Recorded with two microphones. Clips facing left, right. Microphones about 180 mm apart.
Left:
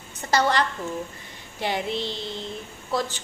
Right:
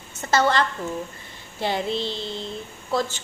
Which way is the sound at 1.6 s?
15° left (ahead or behind).